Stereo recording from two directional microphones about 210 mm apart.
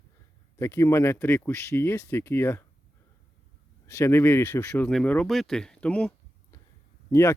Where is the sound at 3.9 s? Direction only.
10° left (ahead or behind).